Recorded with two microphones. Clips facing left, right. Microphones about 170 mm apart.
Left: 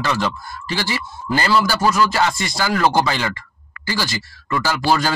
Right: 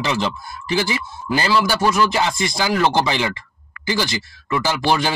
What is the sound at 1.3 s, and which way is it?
Speech, 15° right (ahead or behind).